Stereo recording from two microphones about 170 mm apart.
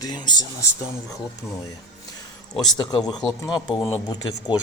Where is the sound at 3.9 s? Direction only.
25° left (ahead or behind).